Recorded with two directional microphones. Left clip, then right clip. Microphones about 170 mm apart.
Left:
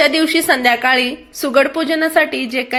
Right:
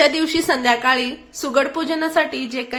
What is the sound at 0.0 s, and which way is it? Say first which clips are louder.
A woman's voice: left 3 dB; 20° left (ahead or behind).